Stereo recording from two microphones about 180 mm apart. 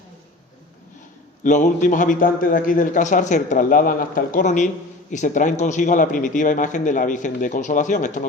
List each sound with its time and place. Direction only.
1.5 s a man's voice: 45° left (ahead or behind)